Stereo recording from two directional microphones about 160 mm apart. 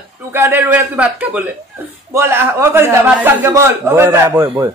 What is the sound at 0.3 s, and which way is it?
A man's voice, 15° right (ahead or behind).